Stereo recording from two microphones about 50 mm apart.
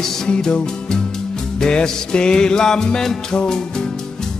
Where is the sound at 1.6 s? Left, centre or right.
Centre.